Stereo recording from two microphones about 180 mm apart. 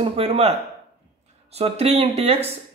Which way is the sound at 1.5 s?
35° right (ahead or behind).